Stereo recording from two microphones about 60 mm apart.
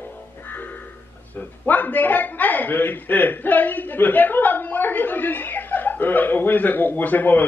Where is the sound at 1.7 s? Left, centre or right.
Left.